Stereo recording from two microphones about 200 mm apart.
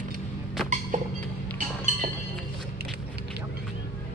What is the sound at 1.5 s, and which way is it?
Chink, 35° right (ahead or behind).